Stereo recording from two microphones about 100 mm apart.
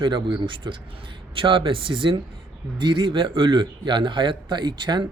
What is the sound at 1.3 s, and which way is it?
Speech, 60° right (ahead or behind).